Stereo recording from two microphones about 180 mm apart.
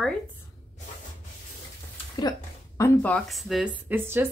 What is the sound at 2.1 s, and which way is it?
Speech, 20° left (ahead or behind).